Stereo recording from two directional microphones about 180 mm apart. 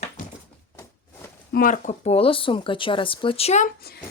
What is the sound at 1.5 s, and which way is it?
Speech, 45° left (ahead or behind).